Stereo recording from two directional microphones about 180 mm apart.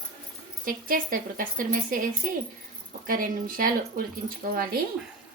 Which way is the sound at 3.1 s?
50° right (ahead or behind).